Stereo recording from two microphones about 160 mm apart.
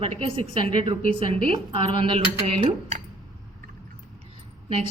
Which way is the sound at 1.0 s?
60° left (ahead or behind).